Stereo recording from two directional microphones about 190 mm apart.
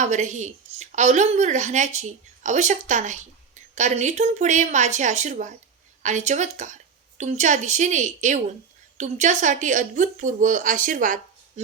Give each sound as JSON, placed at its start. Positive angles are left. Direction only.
{"t": 0.0, "sound": "a woman's voice", "side_deg": -40}